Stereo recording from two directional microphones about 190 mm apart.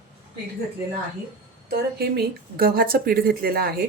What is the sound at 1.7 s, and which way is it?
Speech, 55° right (ahead or behind).